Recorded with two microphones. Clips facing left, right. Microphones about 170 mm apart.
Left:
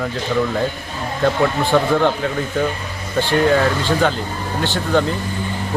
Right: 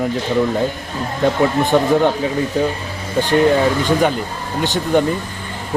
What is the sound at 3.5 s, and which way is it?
Speech, 15° right (ahead or behind).